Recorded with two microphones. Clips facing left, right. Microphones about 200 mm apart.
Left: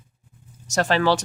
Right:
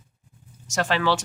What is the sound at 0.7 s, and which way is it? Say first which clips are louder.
Speech: left 3 dB; 40° left (ahead or behind).